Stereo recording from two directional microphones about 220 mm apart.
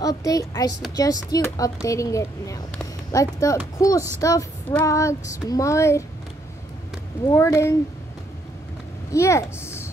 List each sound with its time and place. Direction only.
0.0 s speech: 15° left (ahead or behind)
7.2 s speech: 10° left (ahead or behind)
9.1 s speech: 15° left (ahead or behind)